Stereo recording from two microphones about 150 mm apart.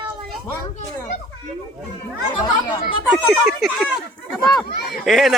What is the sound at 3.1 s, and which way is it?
Speech, centre (ahead or behind).